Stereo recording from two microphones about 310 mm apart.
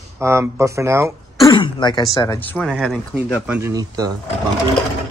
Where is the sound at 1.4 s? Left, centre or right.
Centre.